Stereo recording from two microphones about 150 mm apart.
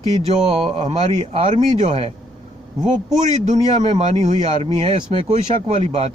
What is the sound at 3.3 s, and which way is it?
Speech, 50° right (ahead or behind).